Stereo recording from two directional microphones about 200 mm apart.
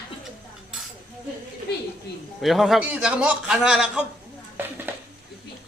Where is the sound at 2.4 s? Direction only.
Centre (ahead or behind).